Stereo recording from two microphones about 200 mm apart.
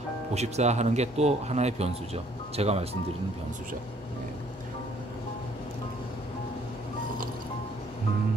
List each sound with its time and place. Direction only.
0.3 s speech: 35° right (ahead or behind)